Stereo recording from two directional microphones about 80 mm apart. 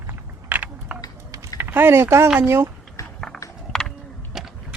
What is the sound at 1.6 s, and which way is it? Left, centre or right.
Speech, right.